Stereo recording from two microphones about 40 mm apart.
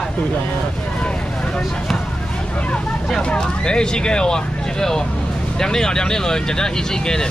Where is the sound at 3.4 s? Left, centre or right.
Left.